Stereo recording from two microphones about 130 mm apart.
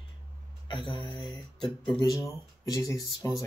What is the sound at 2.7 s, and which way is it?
Speech, 25° left (ahead or behind).